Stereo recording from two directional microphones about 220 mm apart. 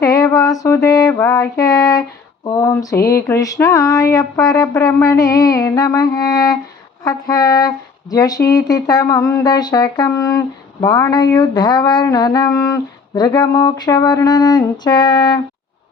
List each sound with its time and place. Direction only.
0.0 s music: 15° left (ahead or behind)
0.9 s speech: 15° left (ahead or behind)